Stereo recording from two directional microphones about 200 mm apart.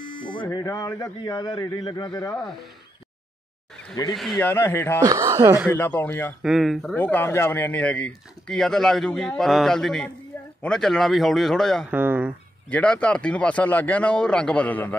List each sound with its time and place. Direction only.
0.2 s speech: 25° left (ahead or behind)
2.3 s speech: centre (ahead or behind)
4.1 s speech: centre (ahead or behind)
4.4 s speech: 10° left (ahead or behind)
5.0 s speech: 15° right (ahead or behind)
5.7 s speech: 10° left (ahead or behind)
6.4 s speech: centre (ahead or behind)
11.9 s speech: 10° right (ahead or behind)
12.6 s speech: 5° left (ahead or behind)